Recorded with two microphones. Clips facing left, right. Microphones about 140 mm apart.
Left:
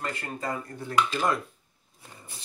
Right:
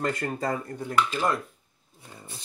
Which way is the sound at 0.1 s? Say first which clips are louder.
Right 5 dB; 40° right (ahead or behind).